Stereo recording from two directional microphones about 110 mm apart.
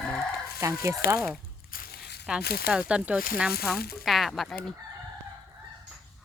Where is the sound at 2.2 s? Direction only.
10° right (ahead or behind).